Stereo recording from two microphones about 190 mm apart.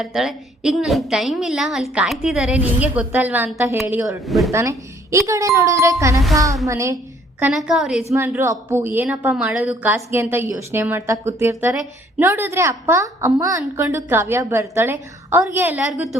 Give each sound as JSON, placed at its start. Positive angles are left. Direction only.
{"t": 0.0, "sound": "a woman's voice", "side_deg": 0}
{"t": 4.5, "sound": "a woman's voice", "side_deg": -15}